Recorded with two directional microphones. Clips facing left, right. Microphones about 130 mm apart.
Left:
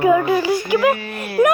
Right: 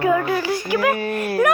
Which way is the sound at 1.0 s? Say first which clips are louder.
Right 3 dB; 50° right (ahead or behind).